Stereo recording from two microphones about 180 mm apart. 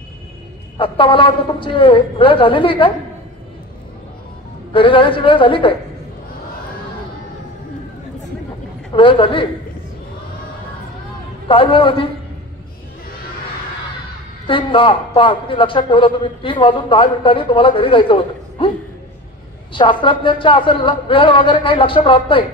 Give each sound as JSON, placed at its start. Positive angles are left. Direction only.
{"t": 0.7, "sound": "a man's voice", "side_deg": 30}
{"t": 4.7, "sound": "a man's voice", "side_deg": 30}
{"t": 8.9, "sound": "a man's voice", "side_deg": 30}
{"t": 11.4, "sound": "a man's voice", "side_deg": 30}
{"t": 14.5, "sound": "a man's voice", "side_deg": 30}
{"t": 19.7, "sound": "a man's voice", "side_deg": 25}